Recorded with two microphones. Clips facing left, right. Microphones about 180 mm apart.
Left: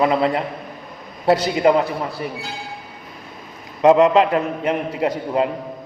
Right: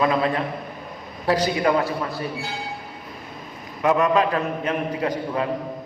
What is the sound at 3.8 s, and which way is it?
A man's voice, 25° left (ahead or behind).